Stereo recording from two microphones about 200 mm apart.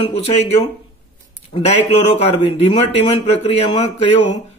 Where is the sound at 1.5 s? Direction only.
30° left (ahead or behind).